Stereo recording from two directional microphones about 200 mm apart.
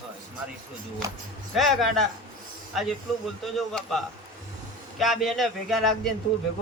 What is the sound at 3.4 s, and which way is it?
A man's voice, centre (ahead or behind).